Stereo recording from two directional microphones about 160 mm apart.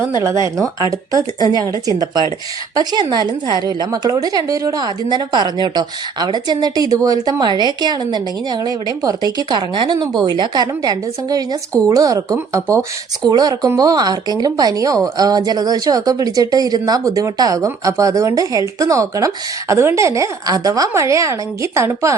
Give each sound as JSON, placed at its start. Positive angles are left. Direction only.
{"t": 0.4, "sound": "a woman's voice", "side_deg": -20}
{"t": 2.7, "sound": "a woman's voice", "side_deg": -25}